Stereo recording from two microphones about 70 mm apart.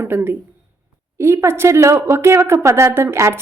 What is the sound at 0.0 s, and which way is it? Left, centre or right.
A woman's voice, right.